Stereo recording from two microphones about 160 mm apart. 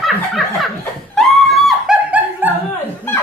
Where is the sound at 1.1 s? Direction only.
Centre (ahead or behind).